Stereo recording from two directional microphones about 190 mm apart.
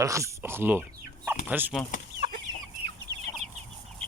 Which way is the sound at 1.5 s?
10° right (ahead or behind).